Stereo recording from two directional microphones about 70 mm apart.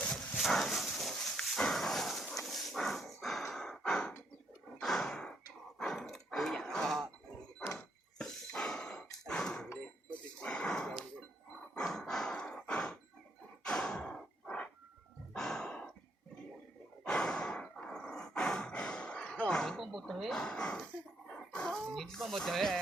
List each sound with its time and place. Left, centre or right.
0.3 s dog: centre
4.8 s gasp: centre
5.8 s dog: centre
8.2 s a sound: centre
11.7 s dog: centre
13.7 s sigh: centre
15.3 s music: centre
17.0 s a sound: centre
20.4 s speech: centre
21.2 s dog: centre